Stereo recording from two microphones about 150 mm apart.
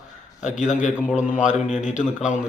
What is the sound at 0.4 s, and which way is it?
A man's voice, 55° left (ahead or behind).